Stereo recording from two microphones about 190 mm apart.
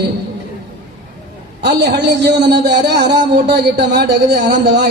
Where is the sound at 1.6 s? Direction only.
65° right (ahead or behind).